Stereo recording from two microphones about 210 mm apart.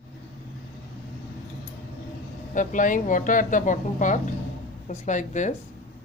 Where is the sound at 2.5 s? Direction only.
40° left (ahead or behind).